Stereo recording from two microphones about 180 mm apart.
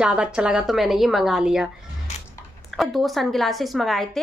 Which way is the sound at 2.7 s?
Centre (ahead or behind).